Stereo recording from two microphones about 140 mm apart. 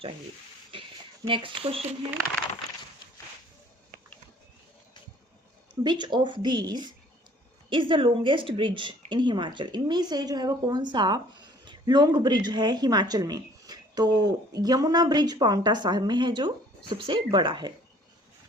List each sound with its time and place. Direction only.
1.3 s a woman's voice: 40° right (ahead or behind)
5.8 s a woman's voice: 30° right (ahead or behind)